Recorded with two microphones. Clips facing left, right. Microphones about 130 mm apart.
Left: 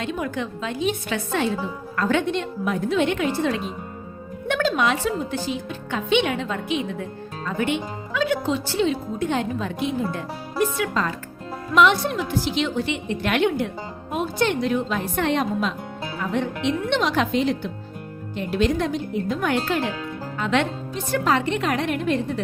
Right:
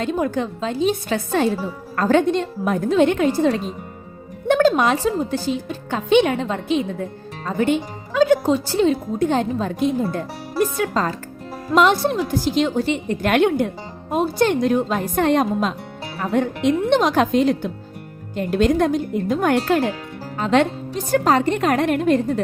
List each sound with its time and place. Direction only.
0.0 s a woman's voice: 40° right (ahead or behind)